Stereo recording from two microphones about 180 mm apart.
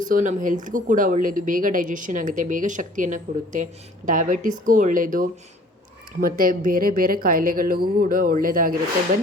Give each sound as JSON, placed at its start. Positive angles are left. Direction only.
{"t": 0.0, "sound": "a woman's voice", "side_deg": -45}